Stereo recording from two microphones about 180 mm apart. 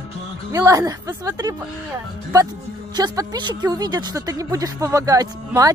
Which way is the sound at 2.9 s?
20° right (ahead or behind).